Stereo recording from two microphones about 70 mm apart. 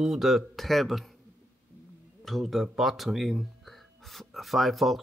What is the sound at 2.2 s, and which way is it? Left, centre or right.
Speech, centre.